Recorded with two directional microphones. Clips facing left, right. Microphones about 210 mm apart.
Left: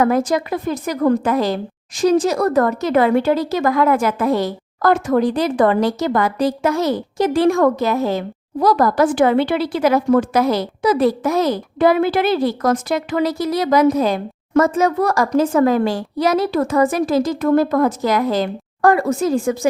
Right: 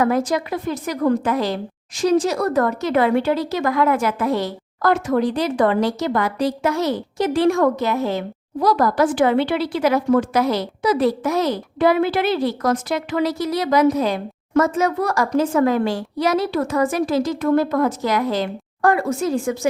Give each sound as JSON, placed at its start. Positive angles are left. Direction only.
{"t": 0.0, "sound": "a woman's voice", "side_deg": 45}